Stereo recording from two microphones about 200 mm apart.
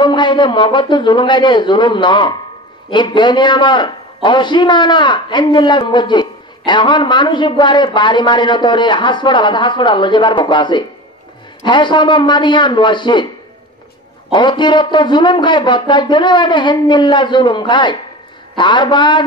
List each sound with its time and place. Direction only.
0.0 s a man's voice: 25° left (ahead or behind)
14.3 s a man's voice: 25° left (ahead or behind)